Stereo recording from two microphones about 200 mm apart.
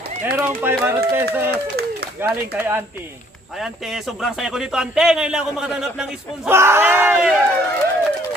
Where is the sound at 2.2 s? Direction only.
10° right (ahead or behind).